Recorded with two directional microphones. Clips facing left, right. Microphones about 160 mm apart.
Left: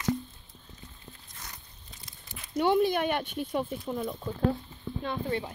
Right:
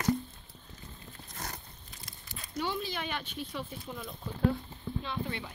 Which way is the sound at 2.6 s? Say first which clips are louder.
Left 11 dB; 60° left (ahead or behind).